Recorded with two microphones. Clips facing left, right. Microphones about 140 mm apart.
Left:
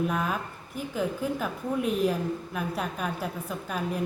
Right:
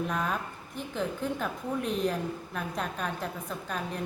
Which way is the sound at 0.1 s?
5° left (ahead or behind).